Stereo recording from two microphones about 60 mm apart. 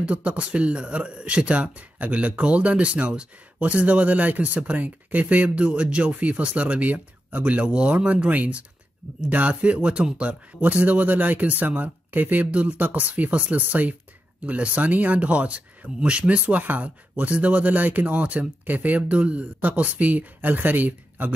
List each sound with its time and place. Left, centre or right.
0.0 s speech: right